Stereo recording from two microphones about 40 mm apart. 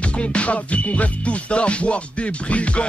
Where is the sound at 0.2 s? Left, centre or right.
Left.